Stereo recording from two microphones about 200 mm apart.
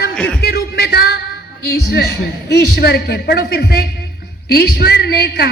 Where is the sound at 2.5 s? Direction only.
55° left (ahead or behind).